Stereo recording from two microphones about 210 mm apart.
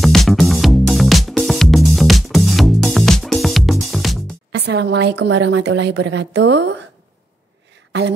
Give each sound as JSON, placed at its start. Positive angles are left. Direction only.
{"t": 0.0, "sound": "music", "side_deg": 0}
{"t": 4.5, "sound": "speech", "side_deg": -50}
{"t": 7.9, "sound": "speech", "side_deg": -55}